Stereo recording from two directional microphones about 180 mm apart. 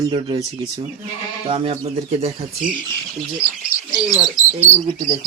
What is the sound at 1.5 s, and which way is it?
Speech, 30° right (ahead or behind).